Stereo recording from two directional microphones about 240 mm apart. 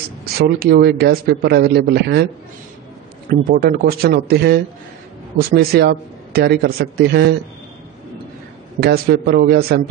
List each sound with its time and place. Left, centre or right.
0.2 s a man's voice: right
3.3 s a man's voice: right
8.7 s a man's voice: right